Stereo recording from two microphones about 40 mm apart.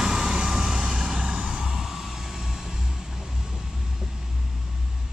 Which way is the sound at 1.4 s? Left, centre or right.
Right.